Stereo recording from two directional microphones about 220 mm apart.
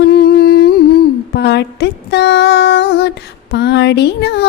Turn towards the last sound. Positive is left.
turn(degrees=50)  # may be behind; listen again after turning